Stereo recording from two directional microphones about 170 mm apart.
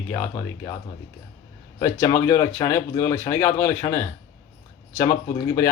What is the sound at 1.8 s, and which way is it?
Speech, 15° left (ahead or behind).